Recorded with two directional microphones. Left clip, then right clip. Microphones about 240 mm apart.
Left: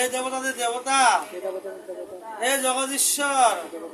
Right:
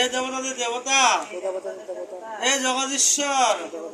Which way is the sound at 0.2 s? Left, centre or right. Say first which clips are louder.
Even; left.